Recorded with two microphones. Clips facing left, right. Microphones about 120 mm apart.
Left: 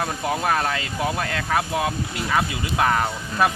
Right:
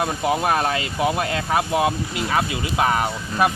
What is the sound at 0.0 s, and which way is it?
Speech, 15° right (ahead or behind).